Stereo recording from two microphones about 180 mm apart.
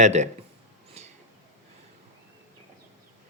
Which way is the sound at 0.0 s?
40° right (ahead or behind).